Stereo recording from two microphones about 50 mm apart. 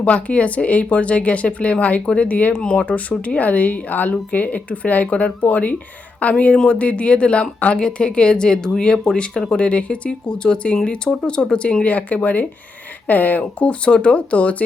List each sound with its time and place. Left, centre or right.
0.0 s speech: left
2.5 s speech: centre
2.8 s speech: left